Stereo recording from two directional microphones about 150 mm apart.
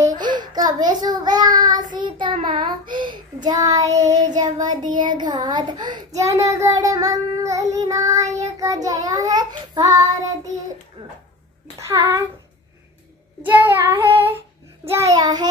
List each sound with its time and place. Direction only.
0.2 s child singing: 30° right (ahead or behind)
4.0 s child singing: 50° right (ahead or behind)
4.4 s a child's voice: 25° right (ahead or behind)
11.8 s a child's voice: 20° right (ahead or behind)
13.4 s a child's voice: 10° right (ahead or behind)